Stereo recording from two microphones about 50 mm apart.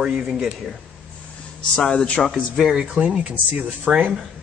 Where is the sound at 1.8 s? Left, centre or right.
Centre.